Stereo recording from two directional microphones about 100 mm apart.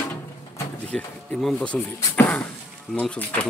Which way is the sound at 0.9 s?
5° left (ahead or behind).